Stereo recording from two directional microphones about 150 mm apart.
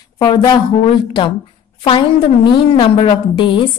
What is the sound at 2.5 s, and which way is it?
A woman's voice, 35° left (ahead or behind).